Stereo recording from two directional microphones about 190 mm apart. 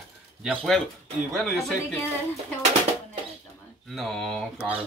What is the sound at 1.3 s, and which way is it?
Speech, 5° left (ahead or behind).